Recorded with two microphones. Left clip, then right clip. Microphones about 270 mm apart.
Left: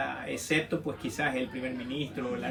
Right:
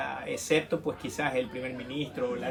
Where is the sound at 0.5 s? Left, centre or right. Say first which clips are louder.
Right 3 dB; centre.